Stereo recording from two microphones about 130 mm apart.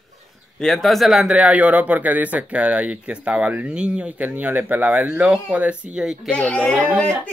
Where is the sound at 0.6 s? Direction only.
5° left (ahead or behind).